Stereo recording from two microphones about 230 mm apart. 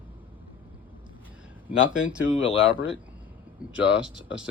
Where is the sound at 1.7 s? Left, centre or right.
Left.